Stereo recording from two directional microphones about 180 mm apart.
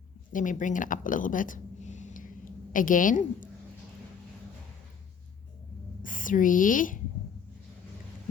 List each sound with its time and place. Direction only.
0.3 s speech: 45° left (ahead or behind)
6.0 s speech: 45° left (ahead or behind)